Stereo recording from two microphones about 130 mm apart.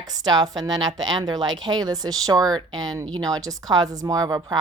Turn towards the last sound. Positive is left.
turn(degrees=-30)  # may be behind; listen again after turning